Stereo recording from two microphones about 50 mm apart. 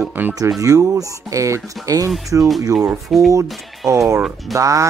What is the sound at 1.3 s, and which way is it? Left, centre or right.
Speech, right.